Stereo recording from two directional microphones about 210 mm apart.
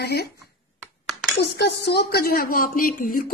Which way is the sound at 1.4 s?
55° left (ahead or behind).